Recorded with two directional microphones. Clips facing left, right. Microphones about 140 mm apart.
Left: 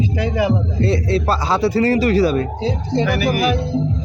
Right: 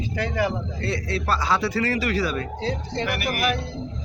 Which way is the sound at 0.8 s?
30° left (ahead or behind).